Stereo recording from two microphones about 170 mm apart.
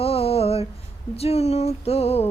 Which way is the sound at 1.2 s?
40° left (ahead or behind).